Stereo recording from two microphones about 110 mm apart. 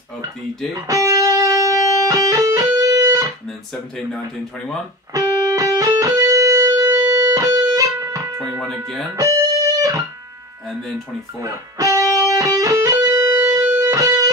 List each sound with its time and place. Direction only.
0.7 s music: 30° right (ahead or behind)
3.4 s speech: 5° left (ahead or behind)
5.1 s music: 30° right (ahead or behind)
8.5 s speech: 5° left (ahead or behind)
9.1 s music: 30° right (ahead or behind)
11.3 s music: 30° right (ahead or behind)